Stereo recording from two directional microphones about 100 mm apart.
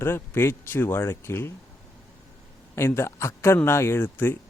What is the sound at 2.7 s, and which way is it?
A man's voice, 25° left (ahead or behind).